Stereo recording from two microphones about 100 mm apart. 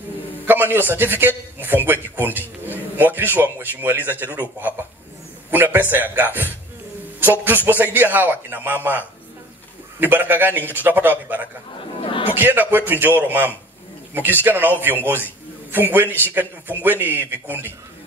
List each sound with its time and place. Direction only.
0.5 s a man's voice: 20° right (ahead or behind)
2.6 s a sound: 20° right (ahead or behind)
3.2 s a man's voice: 20° right (ahead or behind)
12.0 s chatter: 70° left (ahead or behind)
12.3 s a man's voice: 20° right (ahead or behind)
16.2 s a man's voice: 20° right (ahead or behind)